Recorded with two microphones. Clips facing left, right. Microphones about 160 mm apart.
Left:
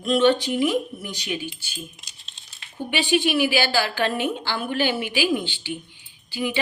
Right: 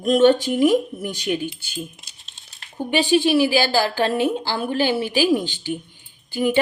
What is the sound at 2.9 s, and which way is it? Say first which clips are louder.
A woman's voice: right 4 dB; 35° right (ahead or behind).